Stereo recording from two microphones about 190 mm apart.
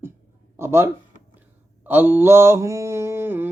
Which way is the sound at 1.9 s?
10° right (ahead or behind).